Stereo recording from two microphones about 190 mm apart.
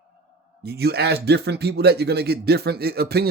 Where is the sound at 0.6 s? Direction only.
55° right (ahead or behind).